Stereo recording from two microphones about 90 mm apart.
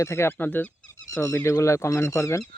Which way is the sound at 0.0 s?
30° left (ahead or behind).